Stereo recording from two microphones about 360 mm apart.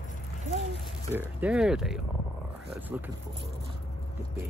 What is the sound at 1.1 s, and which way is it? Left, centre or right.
Speech, centre.